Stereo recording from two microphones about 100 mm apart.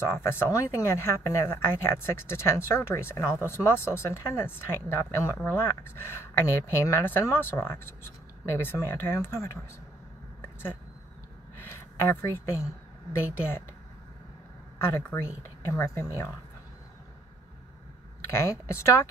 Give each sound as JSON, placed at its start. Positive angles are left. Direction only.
{"t": 0.0, "sound": "speech", "side_deg": 25}
{"t": 10.4, "sound": "a sound", "side_deg": 20}
{"t": 12.1, "sound": "speech", "side_deg": 25}
{"t": 14.9, "sound": "speech", "side_deg": 25}
{"t": 18.3, "sound": "speech", "side_deg": 25}